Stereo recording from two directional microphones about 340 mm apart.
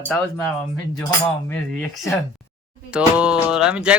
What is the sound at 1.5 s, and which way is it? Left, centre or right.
A man's voice, centre.